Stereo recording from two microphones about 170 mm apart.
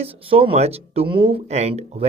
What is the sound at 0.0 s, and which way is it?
Speech, 35° right (ahead or behind).